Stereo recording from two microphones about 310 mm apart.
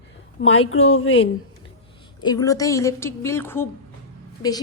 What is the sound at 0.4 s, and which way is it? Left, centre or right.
Speech, left.